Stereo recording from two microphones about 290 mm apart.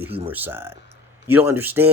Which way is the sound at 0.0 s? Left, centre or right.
Centre.